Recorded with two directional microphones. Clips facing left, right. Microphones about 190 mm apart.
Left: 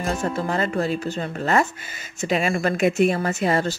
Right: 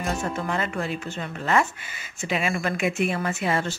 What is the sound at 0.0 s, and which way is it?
A woman's voice, 35° left (ahead or behind).